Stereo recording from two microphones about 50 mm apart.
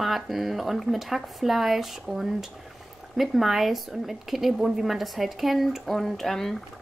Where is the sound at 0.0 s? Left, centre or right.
Centre.